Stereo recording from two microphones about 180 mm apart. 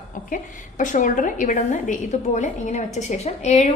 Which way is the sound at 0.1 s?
45° left (ahead or behind).